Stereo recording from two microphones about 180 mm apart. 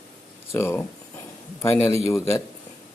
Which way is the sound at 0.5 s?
15° left (ahead or behind).